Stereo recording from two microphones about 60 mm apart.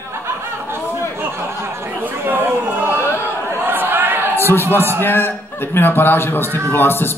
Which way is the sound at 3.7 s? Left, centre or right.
Right.